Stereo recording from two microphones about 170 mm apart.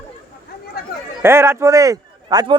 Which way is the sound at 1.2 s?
15° right (ahead or behind).